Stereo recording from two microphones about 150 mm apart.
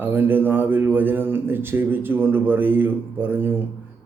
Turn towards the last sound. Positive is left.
turn(degrees=-15)  # may be behind; listen again after turning